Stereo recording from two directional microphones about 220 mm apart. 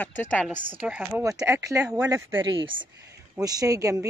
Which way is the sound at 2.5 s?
20° right (ahead or behind).